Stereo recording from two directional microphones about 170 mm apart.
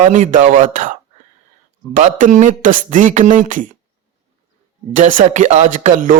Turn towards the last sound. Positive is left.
turn(degrees=-50)  # may be behind; listen again after turning